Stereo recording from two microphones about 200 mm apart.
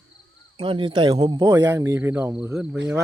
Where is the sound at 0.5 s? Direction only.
25° right (ahead or behind).